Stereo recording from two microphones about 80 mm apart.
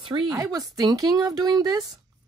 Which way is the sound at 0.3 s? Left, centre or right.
Right.